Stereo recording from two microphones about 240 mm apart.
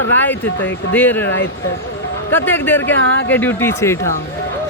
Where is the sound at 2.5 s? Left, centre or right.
Centre.